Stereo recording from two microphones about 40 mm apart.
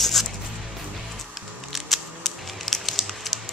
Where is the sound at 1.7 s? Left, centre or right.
Centre.